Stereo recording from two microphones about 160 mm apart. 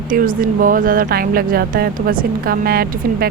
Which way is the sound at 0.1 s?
60° right (ahead or behind).